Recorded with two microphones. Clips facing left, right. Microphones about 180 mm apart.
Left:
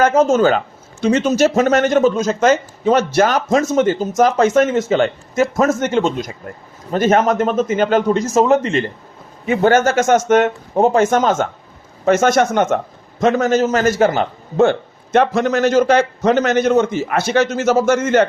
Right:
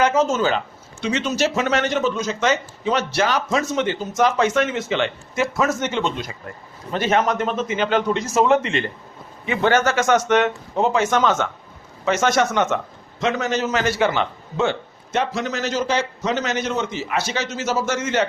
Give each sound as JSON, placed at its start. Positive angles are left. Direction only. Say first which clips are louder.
{"t": 0.0, "sound": "a man's voice", "louder": "left 6 dB", "side_deg": 50}